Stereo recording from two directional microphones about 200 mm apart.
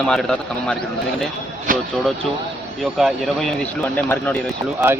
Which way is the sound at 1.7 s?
45° right (ahead or behind).